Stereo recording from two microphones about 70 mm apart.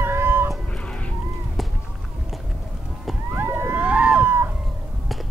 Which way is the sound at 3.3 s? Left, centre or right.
Right.